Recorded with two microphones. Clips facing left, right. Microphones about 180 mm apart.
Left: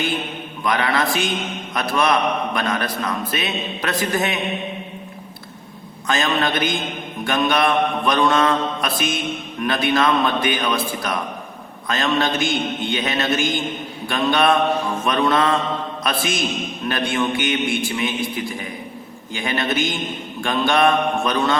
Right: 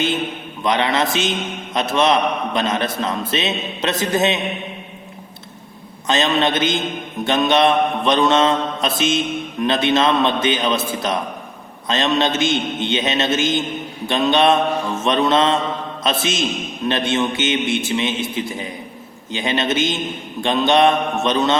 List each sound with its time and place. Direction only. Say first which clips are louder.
0.6 s mantra: right 2 dB; 20° right (ahead or behind)
6.1 s mantra: right 3 dB; 20° right (ahead or behind)